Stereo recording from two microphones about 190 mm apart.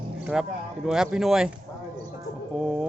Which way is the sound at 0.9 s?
Centre (ahead or behind).